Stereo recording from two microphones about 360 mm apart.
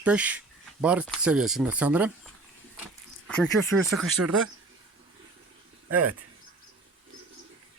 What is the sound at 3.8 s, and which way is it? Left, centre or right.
Speech, centre.